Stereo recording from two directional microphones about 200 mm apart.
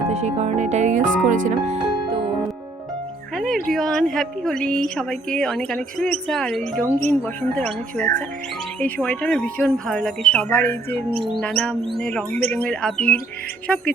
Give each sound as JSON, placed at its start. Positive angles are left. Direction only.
{"t": 0.1, "sound": "speech", "side_deg": -35}
{"t": 3.3, "sound": "a woman's voice", "side_deg": 0}